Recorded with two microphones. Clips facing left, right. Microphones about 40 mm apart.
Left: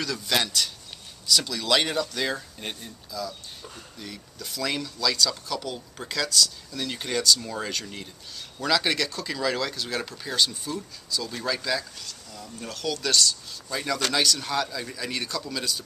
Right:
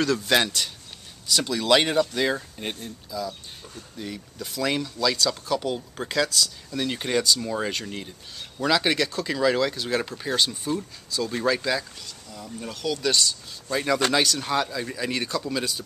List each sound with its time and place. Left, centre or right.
0.0 s speech: right